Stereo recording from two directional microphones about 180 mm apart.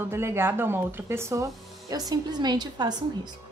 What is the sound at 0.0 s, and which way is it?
A woman's voice, 15° right (ahead or behind).